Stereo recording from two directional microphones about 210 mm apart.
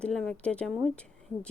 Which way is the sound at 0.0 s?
5° left (ahead or behind).